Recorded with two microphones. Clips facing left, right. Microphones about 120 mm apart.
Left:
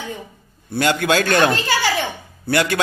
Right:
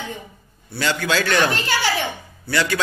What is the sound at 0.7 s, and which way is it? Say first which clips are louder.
A man's voice: left 4 dB; 50° left (ahead or behind).